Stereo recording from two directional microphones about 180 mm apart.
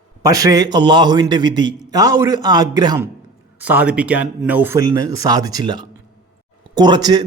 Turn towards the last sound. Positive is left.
turn(degrees=-25)  # may be behind; listen again after turning